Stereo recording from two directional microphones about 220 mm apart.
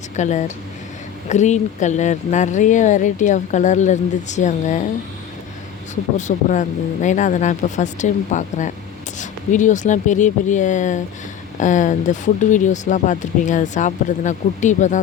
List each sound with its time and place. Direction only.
0.2 s speech: 35° left (ahead or behind)
5.9 s speech: 35° left (ahead or behind)